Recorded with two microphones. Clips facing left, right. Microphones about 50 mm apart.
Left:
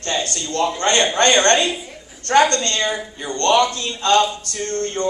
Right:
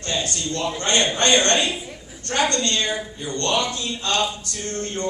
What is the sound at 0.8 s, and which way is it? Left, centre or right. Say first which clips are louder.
Speech: left 3 dB; left.